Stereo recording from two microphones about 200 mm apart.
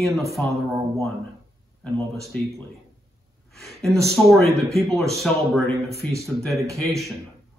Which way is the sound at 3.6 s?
Centre (ahead or behind).